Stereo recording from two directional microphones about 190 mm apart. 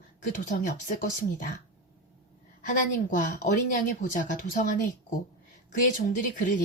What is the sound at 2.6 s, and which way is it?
A woman's voice, 45° left (ahead or behind).